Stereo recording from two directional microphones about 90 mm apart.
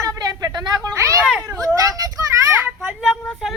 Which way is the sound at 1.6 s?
40° right (ahead or behind).